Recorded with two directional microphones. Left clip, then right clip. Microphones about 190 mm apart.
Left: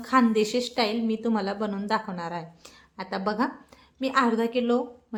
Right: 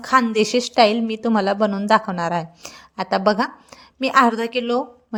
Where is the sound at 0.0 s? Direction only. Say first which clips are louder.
Right 5 dB; 40° right (ahead or behind).